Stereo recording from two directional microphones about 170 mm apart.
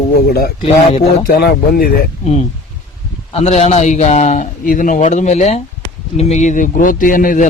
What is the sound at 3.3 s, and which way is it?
A man's voice, 40° left (ahead or behind).